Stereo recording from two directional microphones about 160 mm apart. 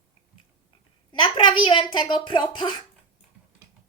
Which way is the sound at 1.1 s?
30° left (ahead or behind).